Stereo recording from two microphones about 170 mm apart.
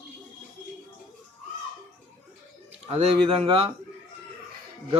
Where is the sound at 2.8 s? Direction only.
35° right (ahead or behind).